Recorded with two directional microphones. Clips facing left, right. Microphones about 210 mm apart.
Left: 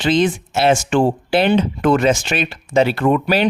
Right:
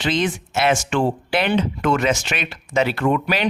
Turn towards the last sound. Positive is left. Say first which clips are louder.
# left 4 dB
turn(degrees=35)  # may be behind; listen again after turning